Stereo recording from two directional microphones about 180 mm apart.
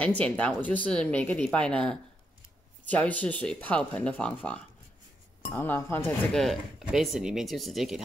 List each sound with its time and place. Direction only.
0.0 s speech: 5° left (ahead or behind)
6.0 s speech: centre (ahead or behind)